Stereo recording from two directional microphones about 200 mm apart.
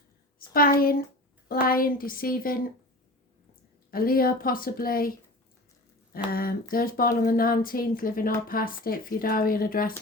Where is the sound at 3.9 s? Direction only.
45° left (ahead or behind).